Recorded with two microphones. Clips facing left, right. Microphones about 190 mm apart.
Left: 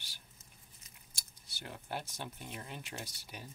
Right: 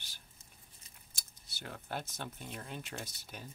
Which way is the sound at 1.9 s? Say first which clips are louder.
Even; 10° left (ahead or behind).